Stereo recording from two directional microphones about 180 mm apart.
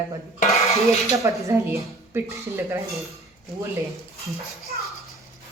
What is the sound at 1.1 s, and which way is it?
Speech, 15° right (ahead or behind).